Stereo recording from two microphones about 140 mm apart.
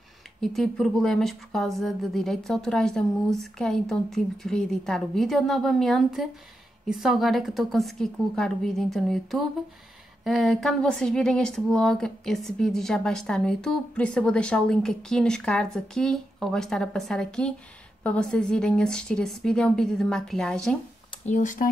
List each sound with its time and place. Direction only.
0.4 s speech: centre (ahead or behind)
21.3 s speech: 65° left (ahead or behind)